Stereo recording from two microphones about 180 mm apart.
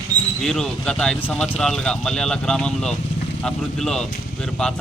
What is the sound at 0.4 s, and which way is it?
Speech, 5° left (ahead or behind).